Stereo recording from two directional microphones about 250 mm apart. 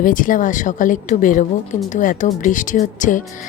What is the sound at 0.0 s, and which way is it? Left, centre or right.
A woman's voice, left.